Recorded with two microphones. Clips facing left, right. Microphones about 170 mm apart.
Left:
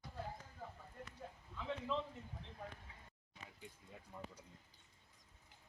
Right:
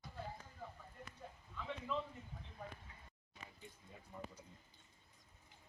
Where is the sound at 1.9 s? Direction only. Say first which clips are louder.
Even; 30° left (ahead or behind).